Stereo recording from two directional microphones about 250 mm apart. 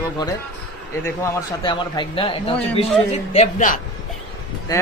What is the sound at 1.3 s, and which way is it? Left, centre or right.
A man's voice, centre.